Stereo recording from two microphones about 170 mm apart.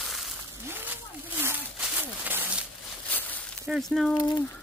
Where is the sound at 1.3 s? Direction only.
10° right (ahead or behind).